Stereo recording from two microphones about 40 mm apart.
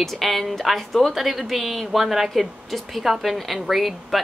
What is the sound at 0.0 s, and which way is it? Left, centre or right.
A woman's voice, centre.